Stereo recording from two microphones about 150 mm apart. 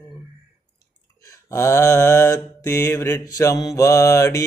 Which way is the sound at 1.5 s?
20° left (ahead or behind).